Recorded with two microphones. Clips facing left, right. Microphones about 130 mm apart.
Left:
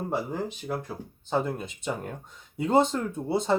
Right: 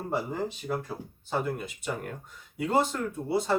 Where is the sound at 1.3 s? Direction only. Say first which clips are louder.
Left 2 dB; 25° left (ahead or behind).